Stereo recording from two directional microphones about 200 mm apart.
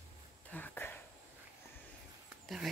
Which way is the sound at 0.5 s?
10° left (ahead or behind).